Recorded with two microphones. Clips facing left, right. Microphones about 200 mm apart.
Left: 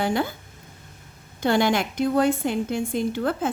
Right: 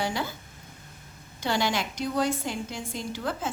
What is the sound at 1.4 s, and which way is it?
A woman's voice, 55° left (ahead or behind).